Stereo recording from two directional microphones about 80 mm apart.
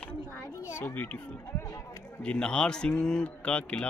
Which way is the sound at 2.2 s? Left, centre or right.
Centre.